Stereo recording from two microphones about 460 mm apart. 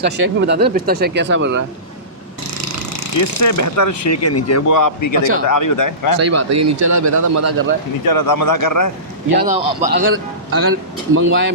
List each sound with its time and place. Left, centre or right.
0.0 s speech: right
3.2 s speech: left
6.1 s a man's voice: right
8.0 s a man's voice: left
9.3 s speech: centre
9.9 s speech: right